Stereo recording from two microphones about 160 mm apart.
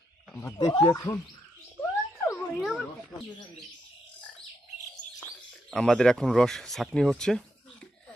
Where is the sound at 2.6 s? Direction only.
Centre (ahead or behind).